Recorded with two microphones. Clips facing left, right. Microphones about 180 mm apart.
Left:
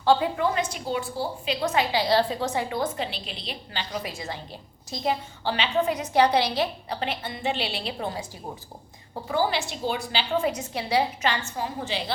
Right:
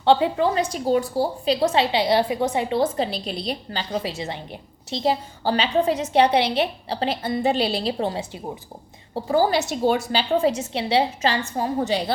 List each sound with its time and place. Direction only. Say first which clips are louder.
0.0 s a woman's voice: right 4 dB; 25° right (ahead or behind); by 1.5 s 40° right (ahead or behind)
1.6 s a woman's voice: right 3 dB; 30° right (ahead or behind)
4.2 s a woman's voice: right 4 dB; 20° right (ahead or behind)
4.9 s a woman's voice: right 5 dB; 35° right (ahead or behind)